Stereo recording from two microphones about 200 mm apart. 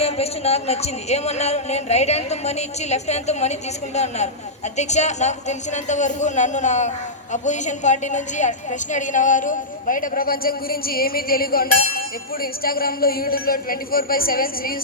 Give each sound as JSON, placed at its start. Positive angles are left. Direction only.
{"t": 0.0, "sound": "a woman's voice", "side_deg": 30}